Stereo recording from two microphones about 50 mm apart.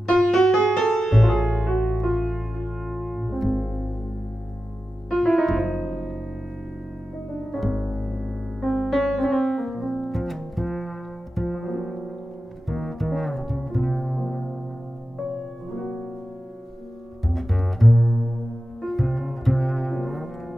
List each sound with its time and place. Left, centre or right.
0.0 s music: centre
1.3 s music: centre
1.7 s music: centre
5.1 s music: centre
7.5 s music: centre
12.6 s double bass: centre
17.3 s double bass: centre